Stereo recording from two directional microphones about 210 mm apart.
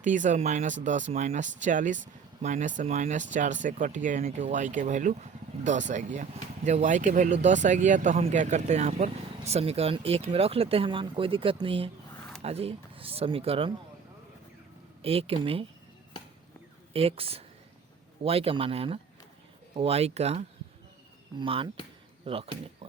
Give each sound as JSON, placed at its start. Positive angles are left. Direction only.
{"t": 0.0, "sound": "speech", "side_deg": -35}
{"t": 15.0, "sound": "speech", "side_deg": -25}
{"t": 16.9, "sound": "speech", "side_deg": -25}